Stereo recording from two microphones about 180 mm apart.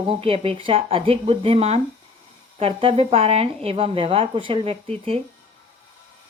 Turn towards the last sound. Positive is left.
turn(degrees=-35)  # may be behind; listen again after turning